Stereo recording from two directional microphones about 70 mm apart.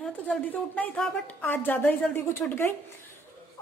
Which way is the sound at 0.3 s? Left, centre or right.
Left.